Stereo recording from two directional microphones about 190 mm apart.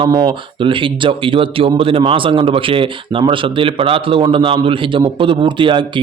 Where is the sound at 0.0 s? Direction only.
25° right (ahead or behind).